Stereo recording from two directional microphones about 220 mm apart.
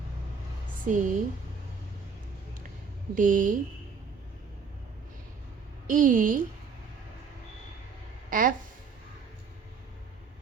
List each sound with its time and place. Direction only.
0.9 s a woman's voice: 35° right (ahead or behind)
3.2 s a woman's voice: 40° right (ahead or behind)
5.9 s a woman's voice: 35° right (ahead or behind)
8.3 s speech: 40° right (ahead or behind)